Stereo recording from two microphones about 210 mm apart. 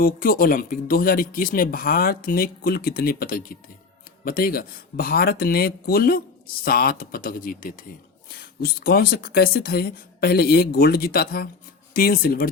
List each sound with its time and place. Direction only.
0.0 s speech: 45° left (ahead or behind)